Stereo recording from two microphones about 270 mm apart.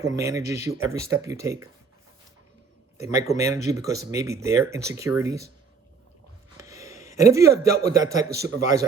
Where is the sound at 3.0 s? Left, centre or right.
Centre.